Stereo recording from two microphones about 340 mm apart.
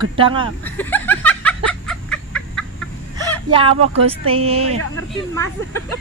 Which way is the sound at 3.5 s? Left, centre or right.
Centre.